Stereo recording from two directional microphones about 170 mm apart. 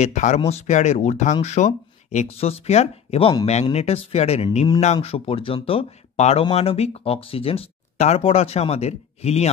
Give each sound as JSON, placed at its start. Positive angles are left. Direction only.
{"t": 0.0, "sound": "speech", "side_deg": 45}